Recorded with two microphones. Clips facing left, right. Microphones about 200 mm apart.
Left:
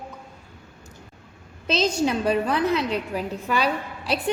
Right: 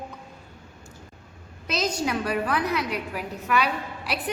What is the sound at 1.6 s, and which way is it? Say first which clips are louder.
A woman's voice: left 5 dB; 25° left (ahead or behind).